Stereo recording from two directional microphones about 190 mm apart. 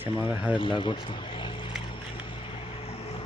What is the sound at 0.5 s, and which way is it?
Speech, 25° left (ahead or behind).